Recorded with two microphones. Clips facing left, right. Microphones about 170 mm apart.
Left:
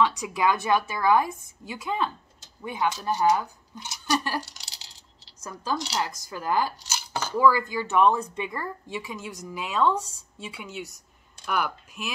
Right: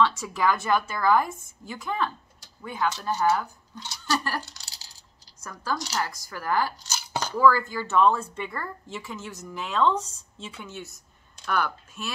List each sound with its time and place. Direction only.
0.0 s a woman's voice: 15° left (ahead or behind)
7.1 s speech: 15° right (ahead or behind)
7.3 s speech: 15° left (ahead or behind)